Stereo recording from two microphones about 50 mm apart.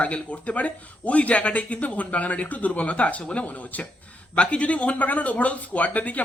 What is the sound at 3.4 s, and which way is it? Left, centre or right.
Speech, left.